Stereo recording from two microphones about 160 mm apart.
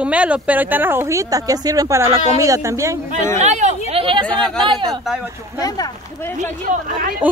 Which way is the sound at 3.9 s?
35° right (ahead or behind).